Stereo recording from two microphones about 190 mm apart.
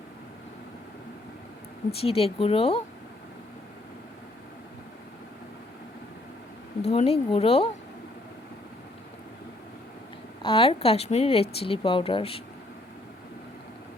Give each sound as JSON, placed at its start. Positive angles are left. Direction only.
{"t": 1.9, "sound": "a woman's voice", "side_deg": 30}
{"t": 6.8, "sound": "a woman's voice", "side_deg": 30}
{"t": 10.4, "sound": "speech", "side_deg": 30}